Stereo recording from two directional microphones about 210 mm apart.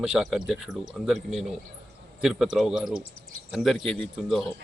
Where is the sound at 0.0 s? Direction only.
Centre (ahead or behind).